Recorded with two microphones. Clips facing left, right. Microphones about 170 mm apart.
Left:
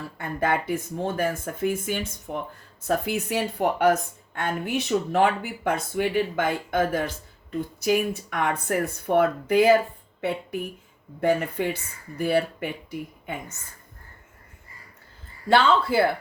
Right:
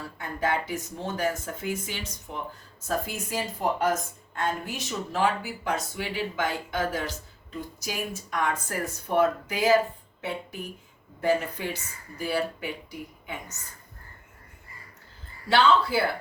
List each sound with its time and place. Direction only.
0.2 s speech: 55° left (ahead or behind)
2.8 s speech: 65° left (ahead or behind)
15.4 s speech: 55° left (ahead or behind)